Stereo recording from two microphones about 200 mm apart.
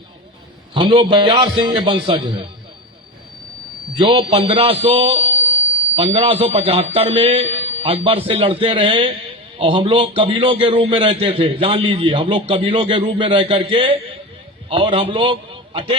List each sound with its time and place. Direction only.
0.7 s a man's voice: 25° right (ahead or behind)
4.0 s a man's voice: 25° right (ahead or behind)